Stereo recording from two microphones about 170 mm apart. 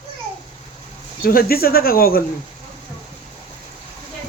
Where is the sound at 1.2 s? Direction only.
60° left (ahead or behind).